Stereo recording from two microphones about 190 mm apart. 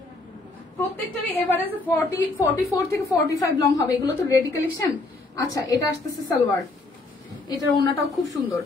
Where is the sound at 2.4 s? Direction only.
20° left (ahead or behind).